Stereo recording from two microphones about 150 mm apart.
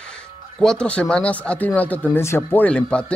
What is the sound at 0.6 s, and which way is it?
Speech, 5° left (ahead or behind).